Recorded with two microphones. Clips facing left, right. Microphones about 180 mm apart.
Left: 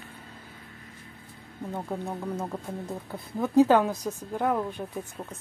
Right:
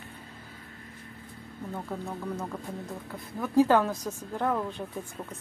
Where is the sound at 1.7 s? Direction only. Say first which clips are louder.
Left 3 dB; 15° left (ahead or behind).